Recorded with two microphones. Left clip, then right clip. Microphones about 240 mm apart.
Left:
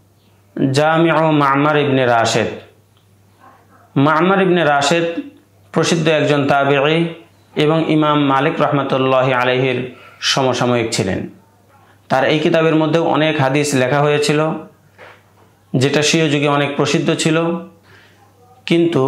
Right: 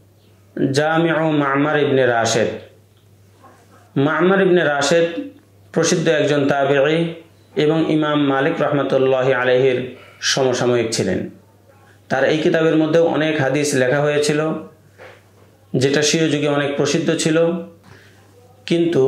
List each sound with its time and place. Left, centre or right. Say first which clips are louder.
0.6 s a man's voice: left 3 dB; left
3.9 s a man's voice: left 3 dB; left
15.7 s a man's voice: left 2 dB; left
18.6 s speech: left 2 dB; left